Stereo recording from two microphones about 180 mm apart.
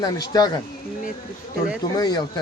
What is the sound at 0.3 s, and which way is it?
Speech, 25° left (ahead or behind).